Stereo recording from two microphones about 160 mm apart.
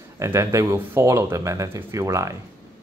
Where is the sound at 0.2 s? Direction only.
20° right (ahead or behind).